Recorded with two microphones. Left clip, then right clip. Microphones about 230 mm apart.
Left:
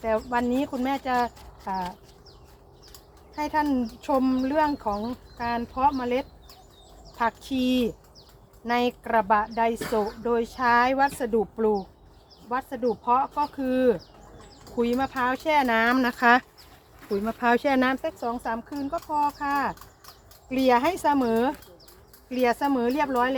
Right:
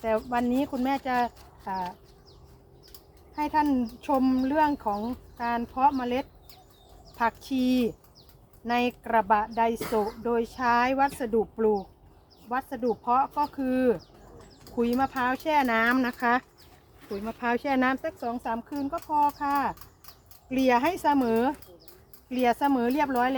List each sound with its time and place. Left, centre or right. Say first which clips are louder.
0.0 s speech: left 2 dB; centre
3.3 s speech: even; centre
16.1 s speech: left 6 dB; left
17.7 s speech: left 2 dB; centre